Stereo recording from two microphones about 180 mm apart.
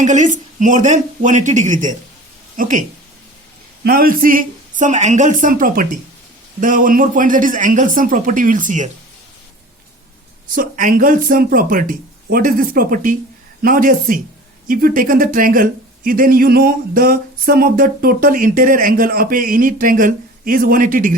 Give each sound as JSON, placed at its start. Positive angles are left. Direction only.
{"t": 0.0, "sound": "speech", "side_deg": -45}
{"t": 3.8, "sound": "speech", "side_deg": -55}
{"t": 10.5, "sound": "speech", "side_deg": -50}